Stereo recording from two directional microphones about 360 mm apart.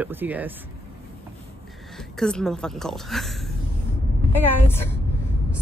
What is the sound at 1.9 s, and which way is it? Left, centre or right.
A woman's voice, centre.